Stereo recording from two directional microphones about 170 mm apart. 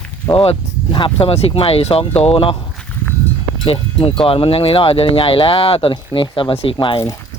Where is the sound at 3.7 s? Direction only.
35° left (ahead or behind).